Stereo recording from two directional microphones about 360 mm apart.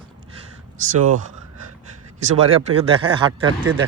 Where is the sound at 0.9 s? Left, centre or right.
Right.